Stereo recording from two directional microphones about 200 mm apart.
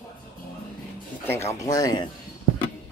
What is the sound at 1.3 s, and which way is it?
Speech, 15° left (ahead or behind).